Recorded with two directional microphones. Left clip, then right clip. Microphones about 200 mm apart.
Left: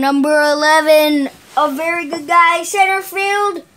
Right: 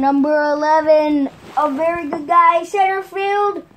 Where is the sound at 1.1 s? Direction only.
30° left (ahead or behind).